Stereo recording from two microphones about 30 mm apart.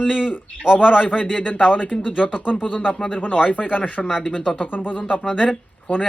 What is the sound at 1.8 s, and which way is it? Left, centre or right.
Speech, left.